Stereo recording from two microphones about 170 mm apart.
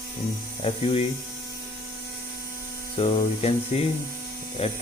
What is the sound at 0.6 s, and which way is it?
Speech, 35° left (ahead or behind).